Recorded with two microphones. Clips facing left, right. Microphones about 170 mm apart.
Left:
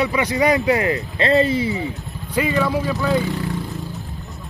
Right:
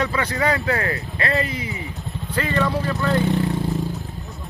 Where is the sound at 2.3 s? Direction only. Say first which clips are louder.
Left 3 dB; 10° left (ahead or behind).